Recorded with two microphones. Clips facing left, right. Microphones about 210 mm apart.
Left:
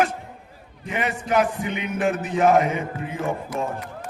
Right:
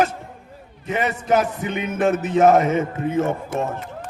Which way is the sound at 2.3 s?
40° right (ahead or behind).